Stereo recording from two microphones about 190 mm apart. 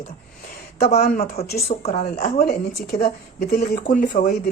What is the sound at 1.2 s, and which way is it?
Speech, 55° left (ahead or behind).